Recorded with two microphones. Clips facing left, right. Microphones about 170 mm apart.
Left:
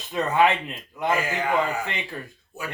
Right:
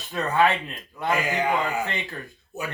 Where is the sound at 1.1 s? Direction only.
15° right (ahead or behind).